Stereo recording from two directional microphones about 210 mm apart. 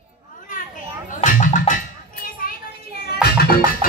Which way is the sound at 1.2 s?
40° left (ahead or behind).